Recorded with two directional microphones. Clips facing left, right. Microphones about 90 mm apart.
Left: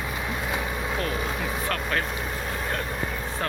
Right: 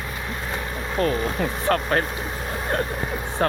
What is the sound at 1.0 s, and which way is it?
Vehicle, 45° right (ahead or behind).